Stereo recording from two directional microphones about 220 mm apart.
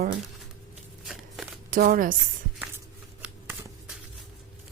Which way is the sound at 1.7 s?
40° right (ahead or behind).